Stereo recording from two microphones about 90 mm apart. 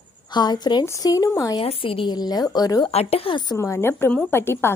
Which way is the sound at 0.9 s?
40° left (ahead or behind).